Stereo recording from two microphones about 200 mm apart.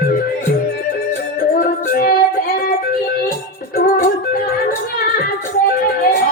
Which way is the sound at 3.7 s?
50° left (ahead or behind).